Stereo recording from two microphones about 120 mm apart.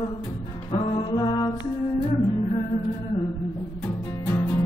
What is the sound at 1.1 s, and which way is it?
Music, 40° left (ahead or behind).